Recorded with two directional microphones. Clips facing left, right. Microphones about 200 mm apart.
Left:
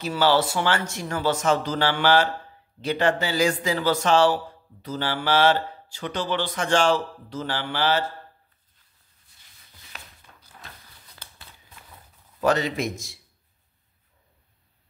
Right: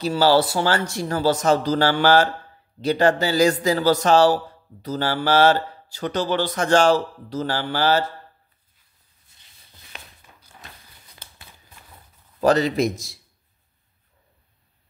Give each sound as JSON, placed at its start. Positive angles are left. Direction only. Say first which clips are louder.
{"t": 0.0, "sound": "mantra", "louder": "right 4 dB", "side_deg": -35}
{"t": 10.3, "sound": "a sound", "louder": "right 1 dB", "side_deg": -10}
{"t": 12.4, "sound": "mantra", "louder": "right 5 dB", "side_deg": -35}